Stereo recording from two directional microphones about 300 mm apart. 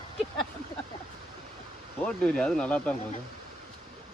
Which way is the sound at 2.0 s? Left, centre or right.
Centre.